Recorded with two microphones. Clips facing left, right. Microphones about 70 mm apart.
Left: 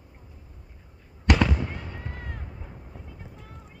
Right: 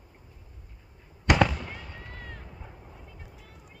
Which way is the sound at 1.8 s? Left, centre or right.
Centre.